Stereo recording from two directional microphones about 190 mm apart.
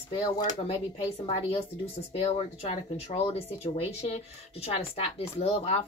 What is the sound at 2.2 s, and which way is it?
Speech, 30° left (ahead or behind).